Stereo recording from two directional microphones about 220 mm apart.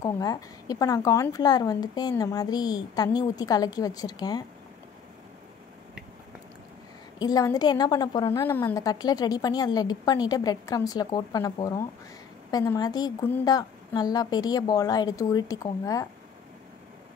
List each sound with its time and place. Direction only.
0.0 s a woman's voice: 15° left (ahead or behind)
7.2 s a woman's voice: 15° left (ahead or behind)